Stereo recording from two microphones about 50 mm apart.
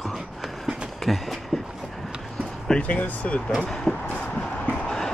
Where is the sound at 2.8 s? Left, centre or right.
Left.